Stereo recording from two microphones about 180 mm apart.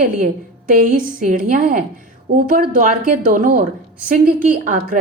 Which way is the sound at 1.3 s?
50° right (ahead or behind).